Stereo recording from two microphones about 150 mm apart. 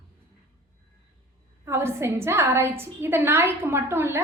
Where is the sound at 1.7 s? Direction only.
15° right (ahead or behind).